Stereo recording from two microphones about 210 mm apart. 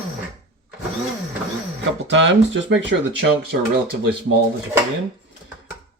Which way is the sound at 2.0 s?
60° right (ahead or behind).